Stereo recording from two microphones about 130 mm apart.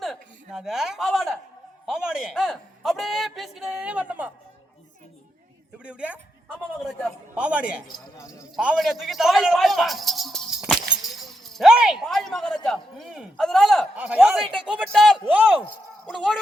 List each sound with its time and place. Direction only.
0.0 s a sound: centre (ahead or behind)
1.9 s a man's voice: 5° right (ahead or behind)
5.8 s a man's voice: 10° right (ahead or behind)
7.3 s a man's voice: 10° right (ahead or behind)
8.1 s speech: 25° left (ahead or behind)
8.5 s speech: centre (ahead or behind)
13.9 s speech: 10° right (ahead or behind)